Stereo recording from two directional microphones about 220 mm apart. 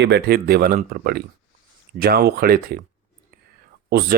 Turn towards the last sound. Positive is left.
turn(degrees=-45)  # may be behind; listen again after turning